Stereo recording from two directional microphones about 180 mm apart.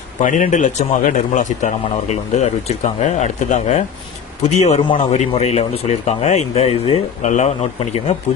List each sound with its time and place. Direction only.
0.2 s a man's voice: 45° left (ahead or behind)